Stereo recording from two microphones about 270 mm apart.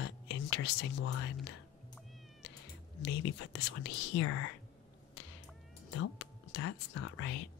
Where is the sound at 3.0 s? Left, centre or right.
Left.